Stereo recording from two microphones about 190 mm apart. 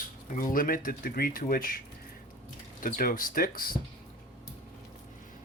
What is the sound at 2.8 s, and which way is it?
Speech, 50° left (ahead or behind).